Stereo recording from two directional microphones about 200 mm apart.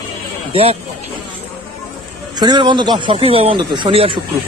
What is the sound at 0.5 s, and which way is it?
Speech, 30° right (ahead or behind).